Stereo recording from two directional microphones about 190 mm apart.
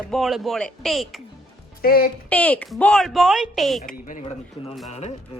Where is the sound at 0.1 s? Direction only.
Centre (ahead or behind).